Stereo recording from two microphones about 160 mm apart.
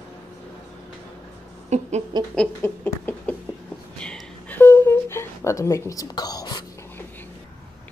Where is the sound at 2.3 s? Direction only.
10° left (ahead or behind).